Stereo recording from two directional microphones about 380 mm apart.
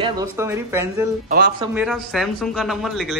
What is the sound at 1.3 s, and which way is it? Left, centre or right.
Speech, right.